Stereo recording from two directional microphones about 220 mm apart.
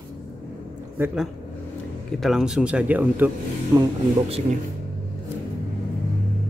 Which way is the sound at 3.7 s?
15° right (ahead or behind).